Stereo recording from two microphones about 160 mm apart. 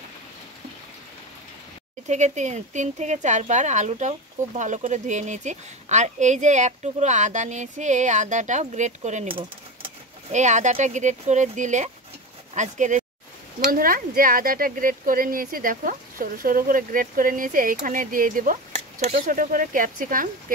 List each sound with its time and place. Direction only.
2.0 s speech: 45° right (ahead or behind)
9.3 s typewriter: 30° right (ahead or behind)
10.3 s speech: 50° right (ahead or behind)
13.7 s speech: 60° right (ahead or behind)